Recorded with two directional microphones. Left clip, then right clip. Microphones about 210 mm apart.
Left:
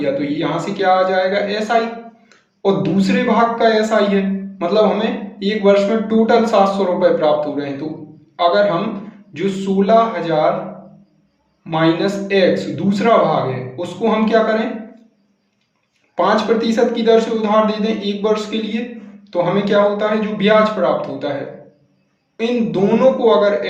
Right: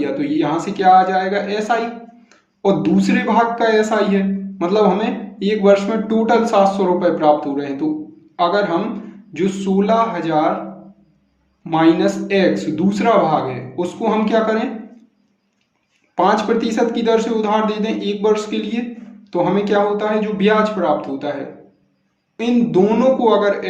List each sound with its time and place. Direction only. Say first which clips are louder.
0.0 s a man's voice: even; 40° right (ahead or behind)
11.6 s a man's voice: right 2 dB; 40° right (ahead or behind)
16.1 s a man's voice: even; 40° right (ahead or behind)
22.4 s a man's voice: right 2 dB; 40° right (ahead or behind)